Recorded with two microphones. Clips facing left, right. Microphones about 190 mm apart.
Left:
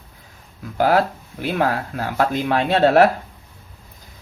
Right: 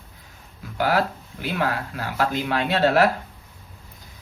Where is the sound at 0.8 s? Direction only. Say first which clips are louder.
Left 5 dB; 45° left (ahead or behind).